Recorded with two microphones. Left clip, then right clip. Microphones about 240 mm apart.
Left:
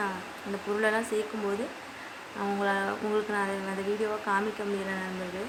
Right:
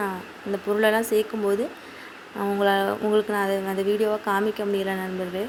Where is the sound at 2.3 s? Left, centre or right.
Right.